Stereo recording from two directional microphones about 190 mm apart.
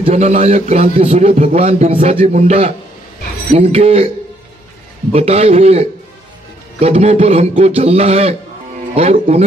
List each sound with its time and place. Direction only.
0.0 s a man's voice: 35° right (ahead or behind)
5.1 s a man's voice: 35° right (ahead or behind)